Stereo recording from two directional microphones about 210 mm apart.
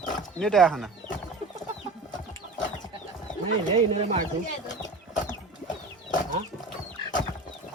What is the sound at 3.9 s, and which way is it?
Speech, 30° right (ahead or behind).